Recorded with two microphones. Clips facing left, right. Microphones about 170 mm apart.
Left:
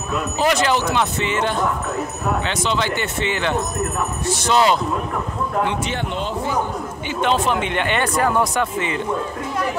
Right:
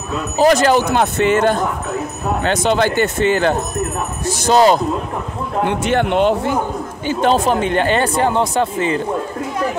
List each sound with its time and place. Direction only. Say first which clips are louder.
0.4 s speech: right 7 dB; 45° right (ahead or behind)
5.9 s speech: right 10 dB; 65° right (ahead or behind)
7.1 s speech: right 5 dB; 40° right (ahead or behind)